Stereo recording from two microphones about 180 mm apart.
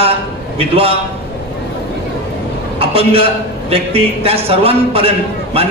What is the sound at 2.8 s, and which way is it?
A man's voice, 30° right (ahead or behind).